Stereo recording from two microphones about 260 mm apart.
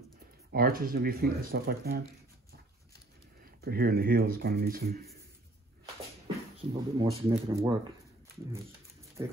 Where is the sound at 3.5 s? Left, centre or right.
Right.